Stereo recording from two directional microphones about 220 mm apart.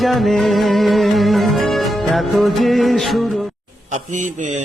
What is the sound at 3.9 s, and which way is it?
Speech, 35° right (ahead or behind).